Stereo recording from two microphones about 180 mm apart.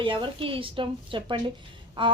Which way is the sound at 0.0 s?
30° right (ahead or behind).